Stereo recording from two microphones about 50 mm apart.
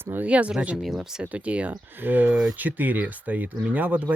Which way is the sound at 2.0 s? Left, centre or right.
Right.